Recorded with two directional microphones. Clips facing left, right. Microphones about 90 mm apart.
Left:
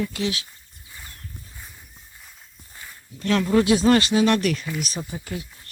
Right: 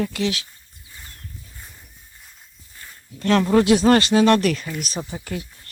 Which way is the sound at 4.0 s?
65° right (ahead or behind).